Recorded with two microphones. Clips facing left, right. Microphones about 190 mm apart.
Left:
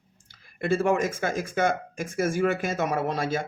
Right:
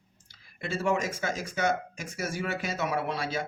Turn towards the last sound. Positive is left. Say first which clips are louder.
# left 4 dB
turn(degrees=50)  # may be behind; listen again after turning